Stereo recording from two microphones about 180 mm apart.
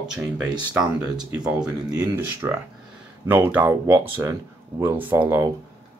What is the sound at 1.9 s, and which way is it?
Speech, 20° right (ahead or behind).